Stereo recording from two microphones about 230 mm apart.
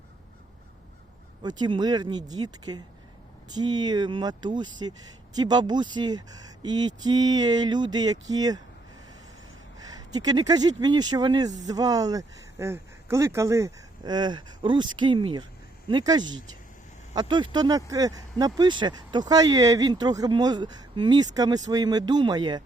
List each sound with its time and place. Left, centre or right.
1.4 s speech: centre
10.1 s speech: centre